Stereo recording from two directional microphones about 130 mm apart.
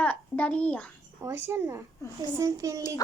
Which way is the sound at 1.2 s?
20° right (ahead or behind).